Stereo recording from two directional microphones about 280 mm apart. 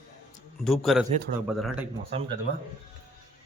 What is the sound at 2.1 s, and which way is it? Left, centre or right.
Speech, right.